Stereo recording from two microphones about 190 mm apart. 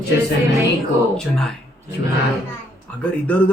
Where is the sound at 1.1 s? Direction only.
5° left (ahead or behind).